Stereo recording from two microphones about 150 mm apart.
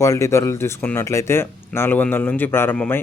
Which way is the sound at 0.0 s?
20° left (ahead or behind).